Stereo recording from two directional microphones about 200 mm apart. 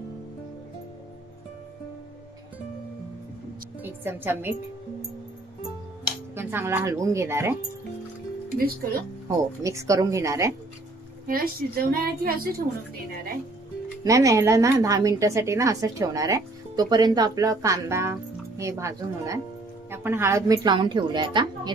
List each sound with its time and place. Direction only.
3.8 s a woman's voice: 10° right (ahead or behind)
6.3 s a woman's voice: 10° right (ahead or behind)
9.6 s a woman's voice: 15° right (ahead or behind)
11.2 s a woman's voice: 45° right (ahead or behind)
14.0 s a woman's voice: 15° right (ahead or behind)